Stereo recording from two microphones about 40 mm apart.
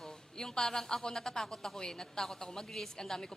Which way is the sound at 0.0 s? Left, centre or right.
Centre.